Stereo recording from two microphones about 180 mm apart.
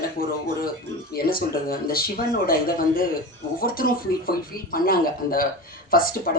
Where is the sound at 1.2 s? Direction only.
55° left (ahead or behind).